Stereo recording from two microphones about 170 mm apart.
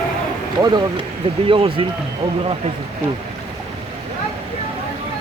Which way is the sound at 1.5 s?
30° right (ahead or behind).